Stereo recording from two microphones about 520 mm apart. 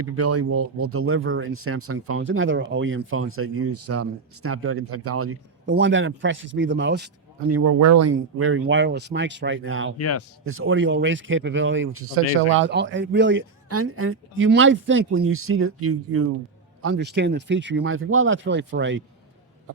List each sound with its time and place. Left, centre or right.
0.0 s speech: right
10.0 s speech: left
10.4 s speech: right